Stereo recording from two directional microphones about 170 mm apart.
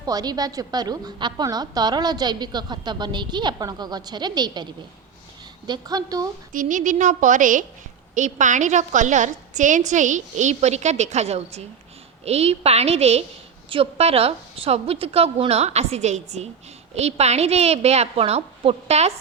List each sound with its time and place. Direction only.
0.0 s a woman's voice: 20° right (ahead or behind)
6.5 s a woman's voice: 50° right (ahead or behind)